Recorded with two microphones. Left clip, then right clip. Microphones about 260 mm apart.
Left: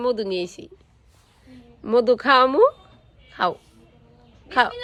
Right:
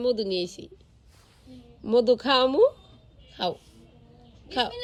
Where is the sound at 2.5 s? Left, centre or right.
Centre.